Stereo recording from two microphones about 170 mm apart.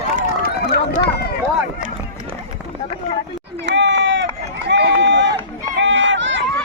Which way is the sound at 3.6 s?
90° right.